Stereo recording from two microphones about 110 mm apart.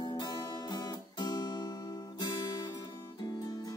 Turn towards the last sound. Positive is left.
turn(degrees=35)  # may be behind; listen again after turning